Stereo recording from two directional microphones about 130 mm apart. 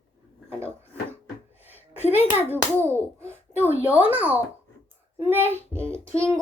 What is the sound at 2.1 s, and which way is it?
A child's voice, 15° right (ahead or behind).